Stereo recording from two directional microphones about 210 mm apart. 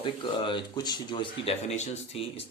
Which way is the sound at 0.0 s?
25° left (ahead or behind).